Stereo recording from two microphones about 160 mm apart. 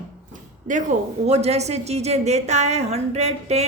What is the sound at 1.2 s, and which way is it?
A woman's voice, 40° right (ahead or behind).